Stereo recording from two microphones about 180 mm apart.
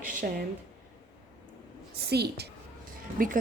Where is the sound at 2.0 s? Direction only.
65° right (ahead or behind).